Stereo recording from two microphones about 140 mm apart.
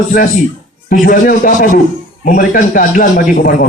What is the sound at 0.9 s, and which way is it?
A man's voice, 80° left.